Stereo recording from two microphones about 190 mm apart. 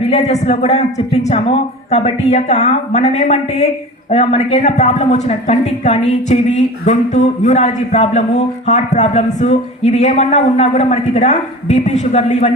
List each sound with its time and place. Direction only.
0.1 s speech: 35° left (ahead or behind)